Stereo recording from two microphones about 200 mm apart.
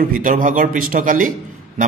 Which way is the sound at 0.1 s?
45° right (ahead or behind).